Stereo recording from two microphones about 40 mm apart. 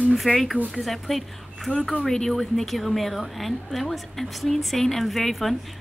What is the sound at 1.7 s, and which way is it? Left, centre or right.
A woman's voice, centre.